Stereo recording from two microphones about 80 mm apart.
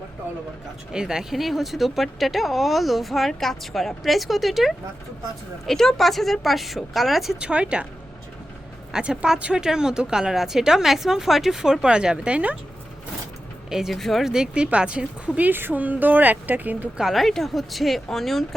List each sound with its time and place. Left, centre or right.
0.9 s speech: centre
7.3 s speech: centre
8.9 s speech: centre
13.7 s speech: centre; by 16.9 s right
17.0 s speech: centre